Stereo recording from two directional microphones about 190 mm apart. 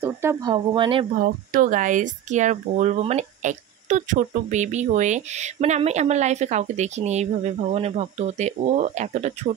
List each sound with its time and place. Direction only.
0.0 s speech: 15° right (ahead or behind)
1.2 s speech: 45° right (ahead or behind)